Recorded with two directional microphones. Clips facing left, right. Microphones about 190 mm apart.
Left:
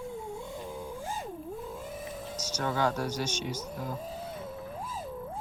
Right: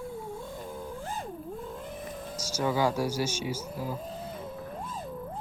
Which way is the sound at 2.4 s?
10° right (ahead or behind).